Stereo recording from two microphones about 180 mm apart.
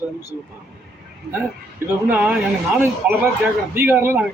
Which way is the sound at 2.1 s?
5° right (ahead or behind).